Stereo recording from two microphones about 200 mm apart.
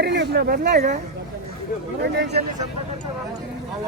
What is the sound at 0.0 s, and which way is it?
Speech, 55° right (ahead or behind).